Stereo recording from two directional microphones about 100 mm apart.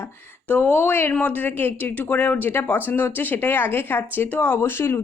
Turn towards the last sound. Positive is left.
turn(degrees=25)  # may be behind; listen again after turning